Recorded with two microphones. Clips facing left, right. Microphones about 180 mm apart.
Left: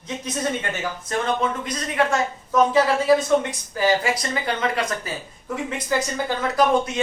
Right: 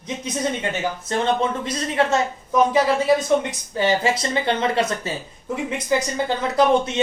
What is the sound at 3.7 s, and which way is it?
Speech, 25° right (ahead or behind).